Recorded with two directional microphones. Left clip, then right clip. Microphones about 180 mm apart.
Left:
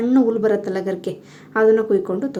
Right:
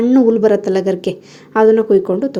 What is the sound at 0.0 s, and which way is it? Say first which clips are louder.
A woman's voice: right 6 dB; 25° right (ahead or behind).